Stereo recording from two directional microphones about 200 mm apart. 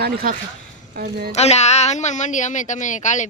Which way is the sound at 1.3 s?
35° left (ahead or behind).